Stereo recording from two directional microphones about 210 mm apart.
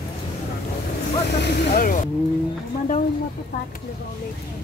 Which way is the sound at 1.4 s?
45° left (ahead or behind).